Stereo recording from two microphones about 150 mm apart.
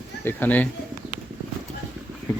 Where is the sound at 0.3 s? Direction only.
10° left (ahead or behind).